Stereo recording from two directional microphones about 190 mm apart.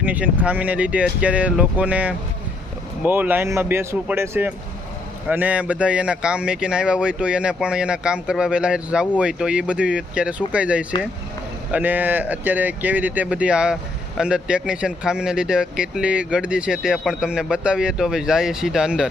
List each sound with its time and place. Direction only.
0.0 s speech: 10° right (ahead or behind)